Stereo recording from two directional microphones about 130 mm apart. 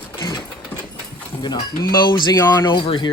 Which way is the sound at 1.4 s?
35° left (ahead or behind).